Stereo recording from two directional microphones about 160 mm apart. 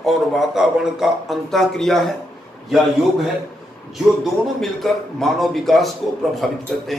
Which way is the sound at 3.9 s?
Centre (ahead or behind).